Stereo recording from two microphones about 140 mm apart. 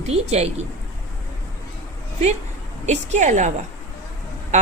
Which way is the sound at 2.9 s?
55° right (ahead or behind).